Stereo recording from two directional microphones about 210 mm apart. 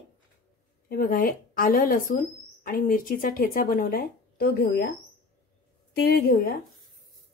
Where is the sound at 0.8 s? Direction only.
45° left (ahead or behind).